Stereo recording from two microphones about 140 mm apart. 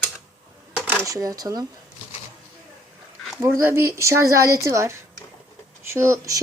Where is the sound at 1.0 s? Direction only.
25° right (ahead or behind).